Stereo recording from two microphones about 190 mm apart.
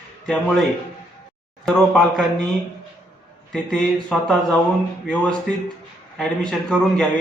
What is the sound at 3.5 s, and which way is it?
A man's voice, centre (ahead or behind).